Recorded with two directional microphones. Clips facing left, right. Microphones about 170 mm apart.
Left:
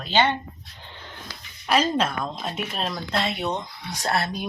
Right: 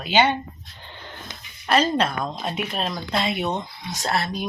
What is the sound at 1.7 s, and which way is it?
Speech, 5° left (ahead or behind).